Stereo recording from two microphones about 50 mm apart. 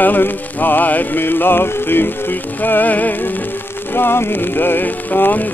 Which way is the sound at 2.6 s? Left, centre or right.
Left.